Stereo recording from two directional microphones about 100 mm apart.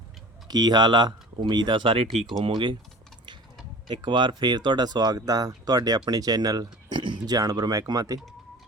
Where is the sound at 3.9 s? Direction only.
55° right (ahead or behind).